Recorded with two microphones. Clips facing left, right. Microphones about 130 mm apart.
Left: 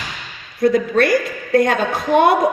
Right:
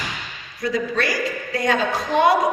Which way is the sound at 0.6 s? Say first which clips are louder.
Left 8 dB; 55° left (ahead or behind).